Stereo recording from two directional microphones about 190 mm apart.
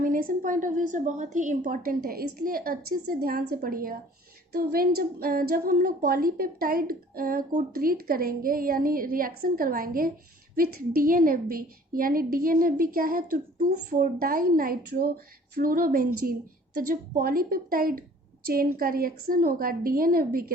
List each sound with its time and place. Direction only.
0.0 s a woman's voice: 45° right (ahead or behind)